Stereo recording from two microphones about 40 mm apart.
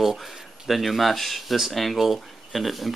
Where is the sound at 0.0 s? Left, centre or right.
Centre.